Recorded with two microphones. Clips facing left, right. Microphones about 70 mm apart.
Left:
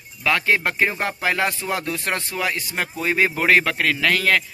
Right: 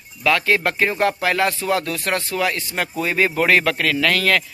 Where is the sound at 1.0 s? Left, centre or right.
Left.